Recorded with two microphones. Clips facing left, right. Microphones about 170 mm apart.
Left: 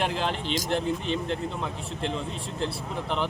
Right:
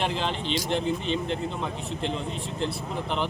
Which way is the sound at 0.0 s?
5° left (ahead or behind).